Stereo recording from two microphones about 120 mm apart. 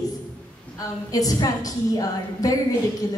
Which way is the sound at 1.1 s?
30° left (ahead or behind).